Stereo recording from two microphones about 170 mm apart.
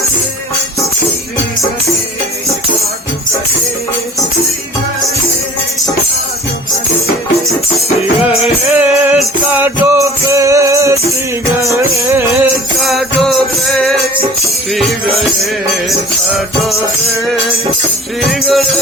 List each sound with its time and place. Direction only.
7.8 s music: 35° left (ahead or behind)
8.7 s music: 10° right (ahead or behind)
12.8 s music: centre (ahead or behind)
16.6 s music: centre (ahead or behind)